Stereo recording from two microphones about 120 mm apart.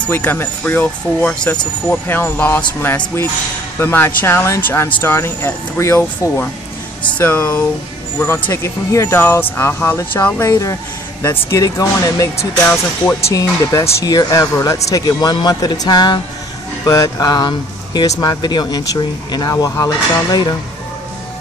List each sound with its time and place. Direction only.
0.1 s speech: 15° left (ahead or behind)
8.5 s speech: 25° left (ahead or behind)
10.4 s speech: 25° left (ahead or behind)
12.6 s speech: 15° left (ahead or behind)
13.3 s speech: 30° left (ahead or behind)